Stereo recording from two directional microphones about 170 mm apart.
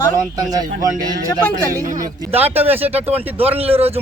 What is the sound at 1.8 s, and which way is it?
Speech, 50° right (ahead or behind).